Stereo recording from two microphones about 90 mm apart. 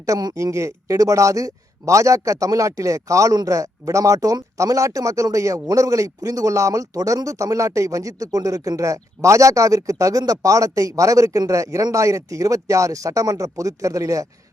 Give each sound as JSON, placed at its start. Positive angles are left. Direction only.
{"t": 0.0, "sound": "a man's voice", "side_deg": -45}